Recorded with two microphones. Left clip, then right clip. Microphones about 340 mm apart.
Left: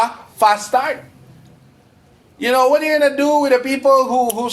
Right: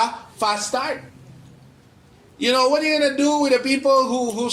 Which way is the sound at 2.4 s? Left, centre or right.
Left.